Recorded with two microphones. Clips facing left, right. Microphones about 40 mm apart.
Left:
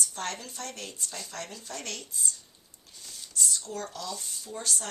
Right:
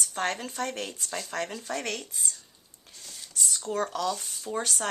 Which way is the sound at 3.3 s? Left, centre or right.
Right.